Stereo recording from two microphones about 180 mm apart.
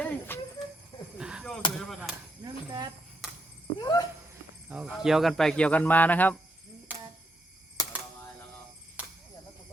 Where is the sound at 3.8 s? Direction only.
20° left (ahead or behind).